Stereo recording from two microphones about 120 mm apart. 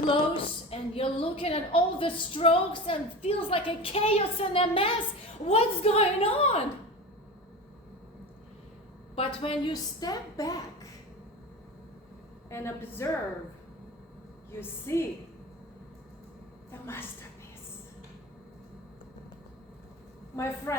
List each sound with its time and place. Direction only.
0.1 s a woman's voice: 50° left (ahead or behind)
5.5 s a woman's voice: 55° left (ahead or behind)
9.1 s a woman's voice: 50° left (ahead or behind)
10.0 s a woman's voice: 30° left (ahead or behind)
12.5 s a woman's voice: 20° left (ahead or behind)
14.5 s a woman's voice: 20° left (ahead or behind)
16.8 s a woman's voice: 20° left (ahead or behind)
20.3 s a woman's voice: 25° left (ahead or behind)